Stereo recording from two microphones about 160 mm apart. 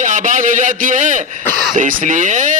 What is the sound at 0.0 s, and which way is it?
A man's voice, 50° right (ahead or behind).